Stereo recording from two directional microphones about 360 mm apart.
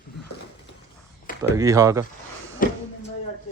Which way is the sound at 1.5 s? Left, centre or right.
Centre.